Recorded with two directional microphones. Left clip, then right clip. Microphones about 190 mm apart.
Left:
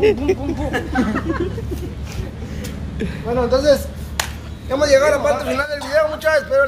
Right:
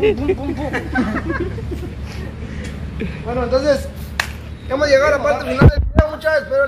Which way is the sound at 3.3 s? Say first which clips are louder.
Left 2 dB; 45° left (ahead or behind).